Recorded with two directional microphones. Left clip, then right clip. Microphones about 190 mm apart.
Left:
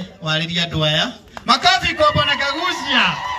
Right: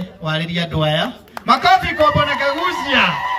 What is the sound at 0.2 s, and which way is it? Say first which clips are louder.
A man's voice: left 2 dB; 65° right (ahead or behind).